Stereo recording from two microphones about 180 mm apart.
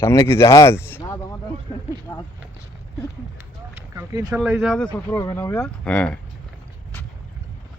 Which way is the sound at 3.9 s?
20° right (ahead or behind).